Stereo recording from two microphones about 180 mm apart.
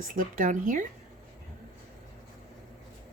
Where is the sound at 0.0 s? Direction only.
50° right (ahead or behind).